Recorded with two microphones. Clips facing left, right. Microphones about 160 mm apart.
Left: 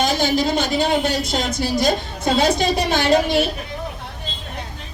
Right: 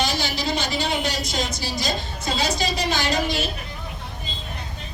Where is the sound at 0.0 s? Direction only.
50° left (ahead or behind).